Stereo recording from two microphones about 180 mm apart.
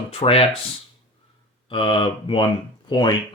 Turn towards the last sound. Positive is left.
turn(degrees=25)  # may be behind; listen again after turning